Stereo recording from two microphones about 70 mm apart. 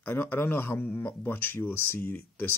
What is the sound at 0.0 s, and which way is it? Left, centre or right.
Speech, left.